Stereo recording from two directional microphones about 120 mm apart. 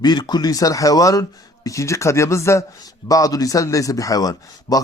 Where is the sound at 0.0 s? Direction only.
35° left (ahead or behind).